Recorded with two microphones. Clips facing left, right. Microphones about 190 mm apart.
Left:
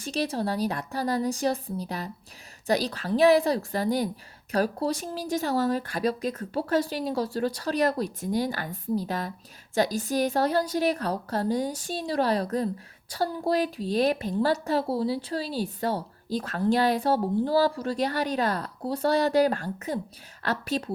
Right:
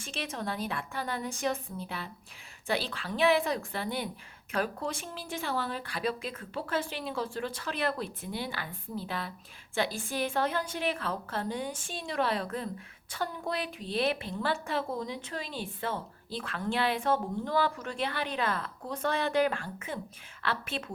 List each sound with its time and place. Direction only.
0.0 s a woman's voice: 35° left (ahead or behind)